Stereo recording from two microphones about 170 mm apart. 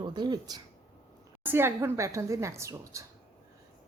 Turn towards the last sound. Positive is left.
turn(degrees=-15)  # may be behind; listen again after turning